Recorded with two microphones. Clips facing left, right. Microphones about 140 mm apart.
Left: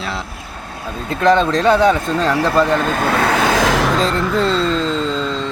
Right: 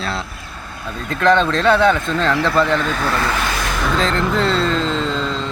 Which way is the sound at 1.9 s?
40° left (ahead or behind).